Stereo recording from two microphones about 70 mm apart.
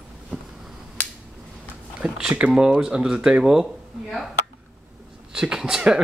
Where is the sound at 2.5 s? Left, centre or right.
Centre.